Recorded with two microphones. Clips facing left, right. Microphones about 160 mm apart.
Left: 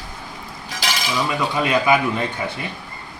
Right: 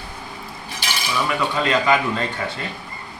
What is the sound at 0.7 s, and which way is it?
Stir, 90° left.